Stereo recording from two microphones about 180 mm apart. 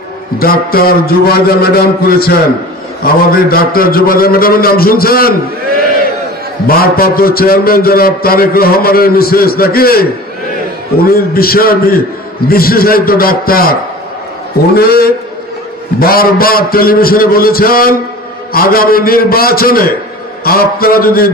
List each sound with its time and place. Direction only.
0.4 s a man's voice: 55° left (ahead or behind)
6.7 s a man's voice: 55° left (ahead or behind)